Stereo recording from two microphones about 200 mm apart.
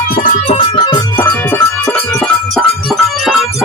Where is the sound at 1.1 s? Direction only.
10° left (ahead or behind).